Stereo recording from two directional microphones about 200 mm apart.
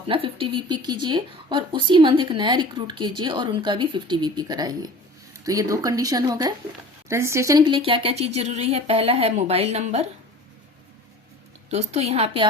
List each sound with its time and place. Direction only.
0.1 s a woman's voice: 25° right (ahead or behind)
11.7 s a woman's voice: 35° right (ahead or behind)